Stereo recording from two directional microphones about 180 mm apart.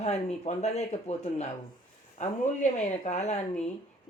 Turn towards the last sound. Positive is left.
turn(degrees=40)  # may be behind; listen again after turning